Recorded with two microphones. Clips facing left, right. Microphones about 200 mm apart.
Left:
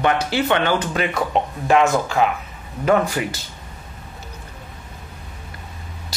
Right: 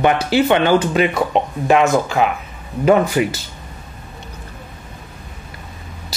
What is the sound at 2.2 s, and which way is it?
Speech, 15° right (ahead or behind).